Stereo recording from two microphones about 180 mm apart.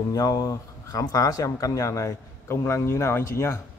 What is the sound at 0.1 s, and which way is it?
Speech, 20° left (ahead or behind).